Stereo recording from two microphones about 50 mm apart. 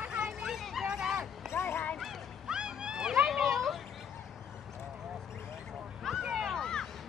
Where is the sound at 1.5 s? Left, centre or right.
Left.